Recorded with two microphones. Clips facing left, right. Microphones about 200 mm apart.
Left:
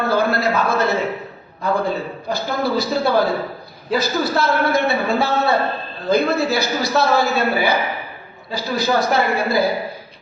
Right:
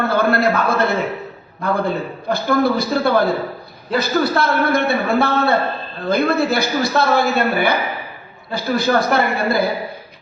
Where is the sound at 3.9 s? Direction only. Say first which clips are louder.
Right 2 dB; 55° right (ahead or behind).